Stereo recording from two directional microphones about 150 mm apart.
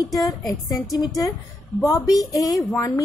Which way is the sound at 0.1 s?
25° left (ahead or behind).